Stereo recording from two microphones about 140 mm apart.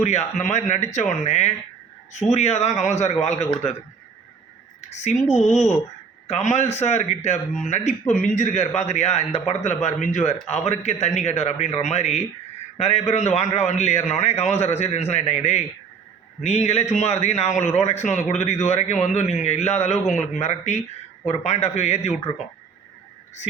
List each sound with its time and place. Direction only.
0.0 s a man's voice: 55° left (ahead or behind)
5.1 s a man's voice: 55° left (ahead or behind)
5.4 s speech: centre (ahead or behind)
6.2 s a man's voice: 50° left (ahead or behind)